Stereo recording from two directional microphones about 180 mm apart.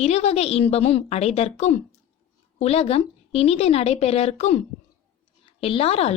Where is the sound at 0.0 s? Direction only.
35° left (ahead or behind).